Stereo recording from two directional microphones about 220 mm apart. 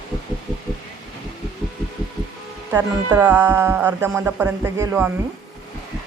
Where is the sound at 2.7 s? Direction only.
15° right (ahead or behind).